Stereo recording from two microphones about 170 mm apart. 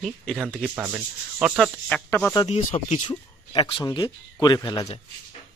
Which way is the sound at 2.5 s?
40° left (ahead or behind).